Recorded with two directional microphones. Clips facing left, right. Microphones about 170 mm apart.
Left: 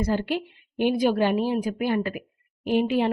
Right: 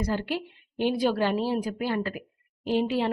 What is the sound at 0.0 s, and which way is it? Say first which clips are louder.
A woman's voice: left 4 dB; 25° left (ahead or behind).